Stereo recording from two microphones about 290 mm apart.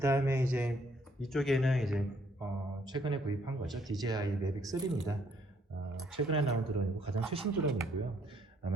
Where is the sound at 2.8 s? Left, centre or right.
Centre.